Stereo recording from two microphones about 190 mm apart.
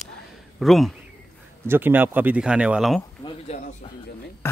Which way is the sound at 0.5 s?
Centre (ahead or behind).